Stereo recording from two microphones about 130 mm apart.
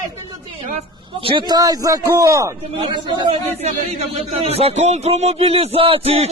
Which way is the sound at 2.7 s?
40° right (ahead or behind).